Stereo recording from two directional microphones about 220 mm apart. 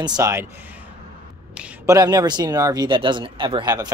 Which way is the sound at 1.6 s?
15° right (ahead or behind).